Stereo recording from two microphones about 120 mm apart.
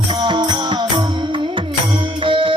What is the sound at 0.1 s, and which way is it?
Music, 40° right (ahead or behind).